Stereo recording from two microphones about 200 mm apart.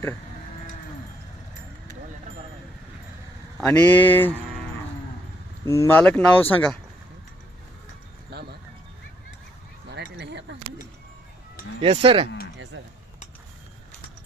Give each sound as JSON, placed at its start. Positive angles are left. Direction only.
{"t": 3.6, "sound": "speech", "side_deg": 10}
{"t": 5.6, "sound": "speech", "side_deg": 15}
{"t": 6.0, "sound": "speech", "side_deg": 5}
{"t": 8.3, "sound": "a sound", "side_deg": -55}
{"t": 9.9, "sound": "a sound", "side_deg": -60}
{"t": 11.8, "sound": "speech", "side_deg": -30}
{"t": 12.7, "sound": "speech", "side_deg": -65}